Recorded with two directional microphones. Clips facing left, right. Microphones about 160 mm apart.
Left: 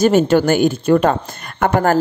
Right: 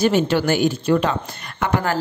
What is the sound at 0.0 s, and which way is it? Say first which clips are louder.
A woman's voice: left 5 dB; 45° left (ahead or behind).